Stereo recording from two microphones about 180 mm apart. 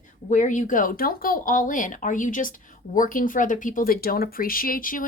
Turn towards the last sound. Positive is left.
turn(degrees=50)  # may be behind; listen again after turning